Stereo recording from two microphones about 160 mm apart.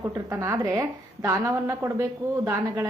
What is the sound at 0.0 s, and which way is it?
A woman's voice, 15° right (ahead or behind).